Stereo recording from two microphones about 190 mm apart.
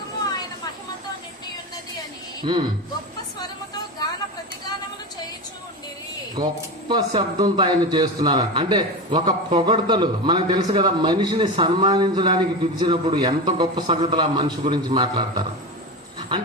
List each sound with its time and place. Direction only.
2.4 s speech: 20° right (ahead or behind)
6.3 s a man's voice: 20° right (ahead or behind)